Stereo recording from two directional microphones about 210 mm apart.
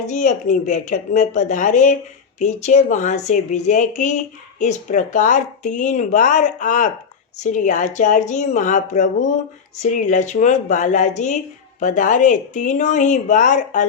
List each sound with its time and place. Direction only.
0.1 s a woman's voice: 35° left (ahead or behind)